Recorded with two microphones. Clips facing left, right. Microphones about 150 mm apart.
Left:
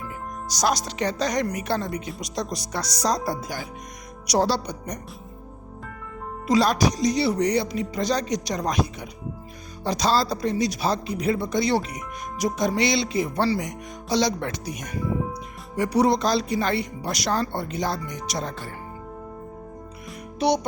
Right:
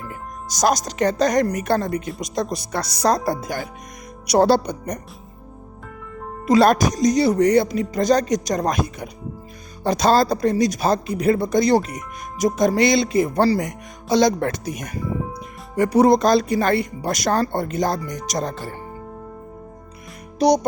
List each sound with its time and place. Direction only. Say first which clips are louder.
0.4 s a woman's voice: right 5 dB; 45° right (ahead or behind)
6.5 s a woman's voice: right 5 dB; 55° right (ahead or behind)
20.4 s music: right 5 dB; 40° right (ahead or behind)